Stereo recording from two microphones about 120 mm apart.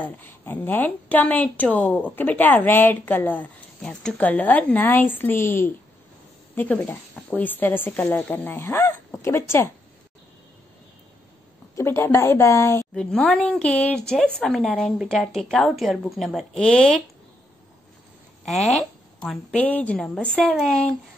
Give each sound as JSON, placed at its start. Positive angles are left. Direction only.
{"t": 0.0, "sound": "a woman's voice", "side_deg": 15}
{"t": 11.7, "sound": "speech", "side_deg": 20}
{"t": 12.9, "sound": "a woman's voice", "side_deg": 5}
{"t": 18.4, "sound": "a woman's voice", "side_deg": 5}